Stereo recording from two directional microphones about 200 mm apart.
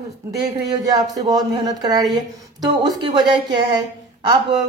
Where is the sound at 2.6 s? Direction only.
20° right (ahead or behind).